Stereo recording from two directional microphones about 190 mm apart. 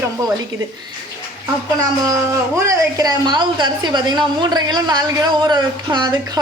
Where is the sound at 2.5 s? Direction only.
15° right (ahead or behind).